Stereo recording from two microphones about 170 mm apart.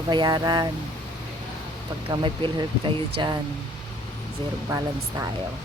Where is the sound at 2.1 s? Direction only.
25° right (ahead or behind).